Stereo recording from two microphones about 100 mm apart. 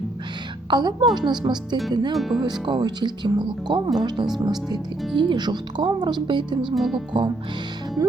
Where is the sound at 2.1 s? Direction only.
Centre (ahead or behind).